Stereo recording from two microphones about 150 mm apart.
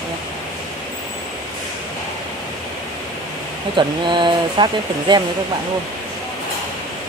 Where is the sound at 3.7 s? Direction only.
30° right (ahead or behind).